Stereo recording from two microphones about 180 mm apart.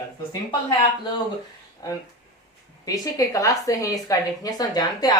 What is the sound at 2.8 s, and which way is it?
A woman's voice, 20° left (ahead or behind).